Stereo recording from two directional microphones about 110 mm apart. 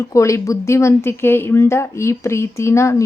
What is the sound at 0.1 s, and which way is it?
A woman's voice, 30° left (ahead or behind).